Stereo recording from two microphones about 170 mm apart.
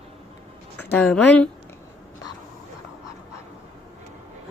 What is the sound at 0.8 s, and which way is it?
Speech, 10° left (ahead or behind).